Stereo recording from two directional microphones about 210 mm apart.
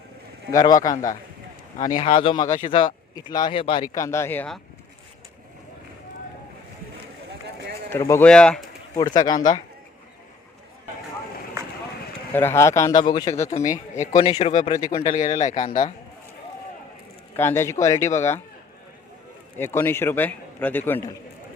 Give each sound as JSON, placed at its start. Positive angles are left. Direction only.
{"t": 0.5, "sound": "a man's voice", "side_deg": 15}
{"t": 2.0, "sound": "speech", "side_deg": 25}
{"t": 3.9, "sound": "a man's voice", "side_deg": 15}
{"t": 7.9, "sound": "a man's voice", "side_deg": 15}
{"t": 9.0, "sound": "speech", "side_deg": 20}
{"t": 12.3, "sound": "a man's voice", "side_deg": 10}
{"t": 13.6, "sound": "a man's voice", "side_deg": 35}
{"t": 14.8, "sound": "a man's voice", "side_deg": 20}
{"t": 15.0, "sound": "a man's voice", "side_deg": 35}
{"t": 17.3, "sound": "a man's voice", "side_deg": 10}
{"t": 19.5, "sound": "a man's voice", "side_deg": 10}